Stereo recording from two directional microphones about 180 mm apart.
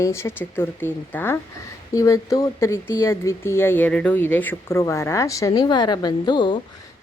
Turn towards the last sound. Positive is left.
turn(degrees=25)  # may be behind; listen again after turning